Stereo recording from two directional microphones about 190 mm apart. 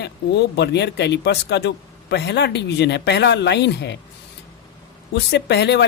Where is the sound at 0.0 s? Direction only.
65° left (ahead or behind).